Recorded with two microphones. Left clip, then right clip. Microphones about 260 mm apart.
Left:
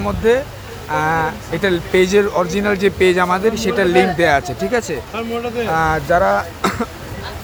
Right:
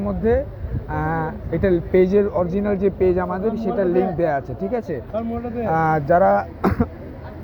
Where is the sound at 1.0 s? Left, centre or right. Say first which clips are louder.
Left 6 dB; centre.